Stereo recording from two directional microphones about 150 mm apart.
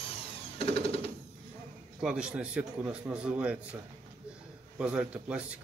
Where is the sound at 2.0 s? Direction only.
5° right (ahead or behind).